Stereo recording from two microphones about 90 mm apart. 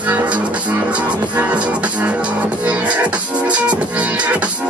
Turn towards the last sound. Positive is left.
turn(degrees=-15)  # may be behind; listen again after turning